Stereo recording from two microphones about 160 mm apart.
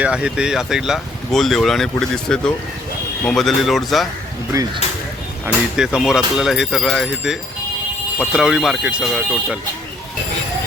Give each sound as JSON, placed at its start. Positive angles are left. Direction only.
{"t": 0.0, "sound": "speech", "side_deg": -5}
{"t": 4.5, "sound": "speech", "side_deg": -20}
{"t": 5.7, "sound": "speech", "side_deg": -5}